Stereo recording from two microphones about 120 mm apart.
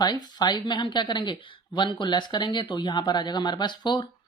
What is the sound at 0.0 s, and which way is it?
Speech, 35° left (ahead or behind).